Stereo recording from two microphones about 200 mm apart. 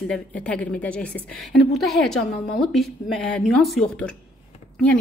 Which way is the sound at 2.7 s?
Centre (ahead or behind).